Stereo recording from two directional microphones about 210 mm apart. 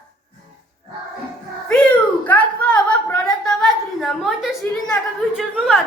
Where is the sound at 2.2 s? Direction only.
5° left (ahead or behind).